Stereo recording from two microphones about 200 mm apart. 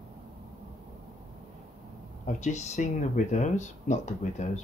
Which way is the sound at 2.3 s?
35° left (ahead or behind).